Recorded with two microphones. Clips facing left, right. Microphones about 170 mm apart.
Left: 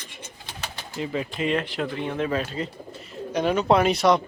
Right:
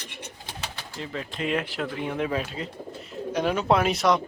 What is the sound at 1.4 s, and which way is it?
Speech, 5° right (ahead or behind).